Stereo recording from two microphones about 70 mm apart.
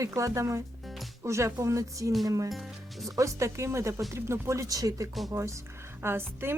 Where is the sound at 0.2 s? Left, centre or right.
Right.